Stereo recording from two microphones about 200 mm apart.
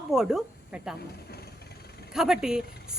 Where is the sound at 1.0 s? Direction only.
50° left (ahead or behind).